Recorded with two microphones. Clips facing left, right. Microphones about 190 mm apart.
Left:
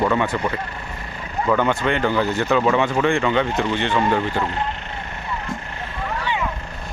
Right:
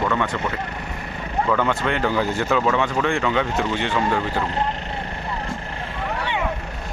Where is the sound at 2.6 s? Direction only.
5° left (ahead or behind).